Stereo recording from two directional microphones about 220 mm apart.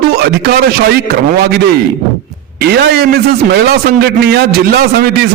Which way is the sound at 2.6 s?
45° right (ahead or behind).